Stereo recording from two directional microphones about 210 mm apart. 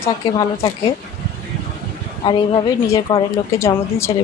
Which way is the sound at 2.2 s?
20° left (ahead or behind).